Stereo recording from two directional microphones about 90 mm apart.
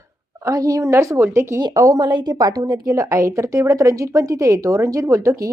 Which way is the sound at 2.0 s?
55° right (ahead or behind).